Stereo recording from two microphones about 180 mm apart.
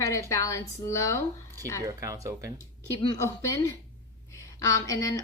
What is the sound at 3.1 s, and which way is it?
Speech, 15° left (ahead or behind).